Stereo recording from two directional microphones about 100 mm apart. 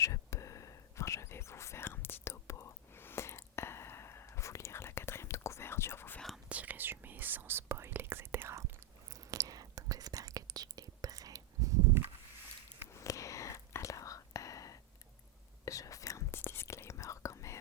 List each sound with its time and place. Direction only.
0.0 s whispering: 30° left (ahead or behind)
6.1 s whispering: centre (ahead or behind)
6.5 s whispering: 15° right (ahead or behind)
9.1 s whispering: 35° right (ahead or behind)
12.9 s whispering: 30° left (ahead or behind)